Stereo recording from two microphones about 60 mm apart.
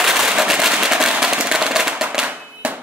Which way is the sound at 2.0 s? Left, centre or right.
Centre.